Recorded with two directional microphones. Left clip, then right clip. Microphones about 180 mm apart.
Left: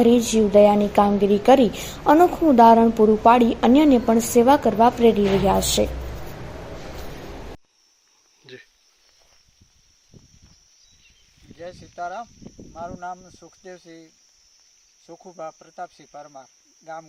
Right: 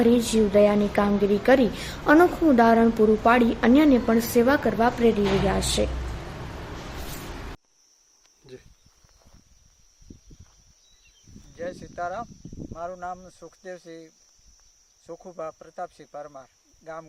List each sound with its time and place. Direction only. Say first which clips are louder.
0.0 s a woman's voice: left 3 dB; 10° left (ahead or behind)
8.5 s a sound: left 3 dB; centre (ahead or behind)
11.5 s cricket: right 2 dB; 5° right (ahead or behind)
12.7 s speech: left 1 dB; 10° right (ahead or behind)